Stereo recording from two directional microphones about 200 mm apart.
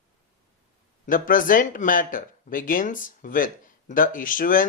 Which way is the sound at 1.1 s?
45° left (ahead or behind).